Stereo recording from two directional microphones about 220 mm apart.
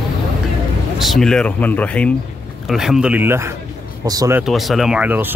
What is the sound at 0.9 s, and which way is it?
Speech, centre (ahead or behind).